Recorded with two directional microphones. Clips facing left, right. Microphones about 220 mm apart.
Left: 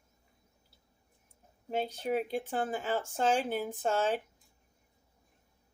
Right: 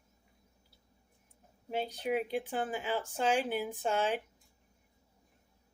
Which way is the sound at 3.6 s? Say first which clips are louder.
Left 1 dB; 15° right (ahead or behind).